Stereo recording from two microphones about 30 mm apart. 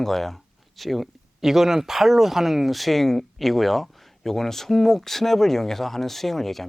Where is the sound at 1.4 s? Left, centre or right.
Centre.